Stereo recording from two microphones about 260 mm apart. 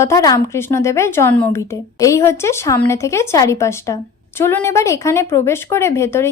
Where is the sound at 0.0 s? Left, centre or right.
Centre.